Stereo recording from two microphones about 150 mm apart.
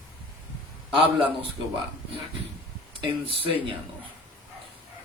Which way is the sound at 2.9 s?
35° right (ahead or behind).